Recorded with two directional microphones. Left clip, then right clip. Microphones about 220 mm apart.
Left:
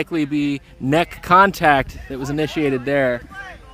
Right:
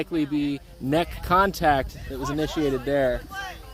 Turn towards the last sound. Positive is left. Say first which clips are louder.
# left 4 dB
turn(degrees=45)  # may be behind; listen again after turning